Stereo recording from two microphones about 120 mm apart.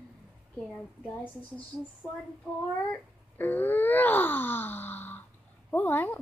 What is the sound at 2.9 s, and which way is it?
Wail, 15° left (ahead or behind).